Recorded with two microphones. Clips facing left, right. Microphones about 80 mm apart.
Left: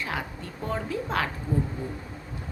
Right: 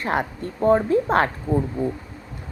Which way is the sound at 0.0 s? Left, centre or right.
Right.